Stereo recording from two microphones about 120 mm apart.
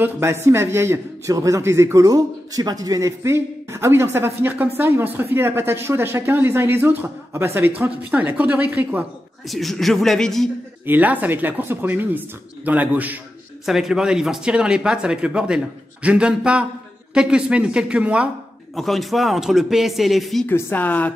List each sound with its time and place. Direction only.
0.0 s a man's voice: 20° right (ahead or behind)
9.5 s speech: centre (ahead or behind)
10.9 s speech: 15° right (ahead or behind)
18.8 s speech: centre (ahead or behind)
20.4 s a woman's voice: 15° left (ahead or behind)